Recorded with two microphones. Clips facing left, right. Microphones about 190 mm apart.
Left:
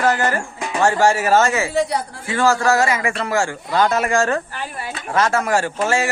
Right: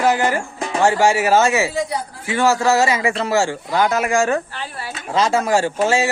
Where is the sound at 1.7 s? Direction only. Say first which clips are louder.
Left 3 dB; 70° left (ahead or behind).